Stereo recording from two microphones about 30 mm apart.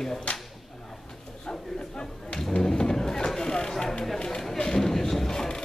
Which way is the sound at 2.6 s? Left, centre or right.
Left.